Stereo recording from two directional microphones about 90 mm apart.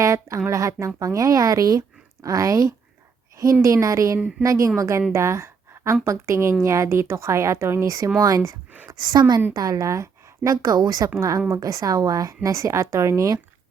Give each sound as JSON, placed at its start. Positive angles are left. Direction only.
{"t": 0.0, "sound": "a woman's voice", "side_deg": -35}